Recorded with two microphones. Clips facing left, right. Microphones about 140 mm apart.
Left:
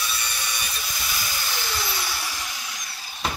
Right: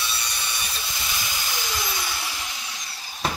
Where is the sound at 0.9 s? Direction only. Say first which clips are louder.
Even; 20° right (ahead or behind).